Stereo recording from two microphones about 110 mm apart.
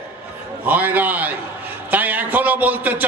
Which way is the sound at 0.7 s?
15° right (ahead or behind).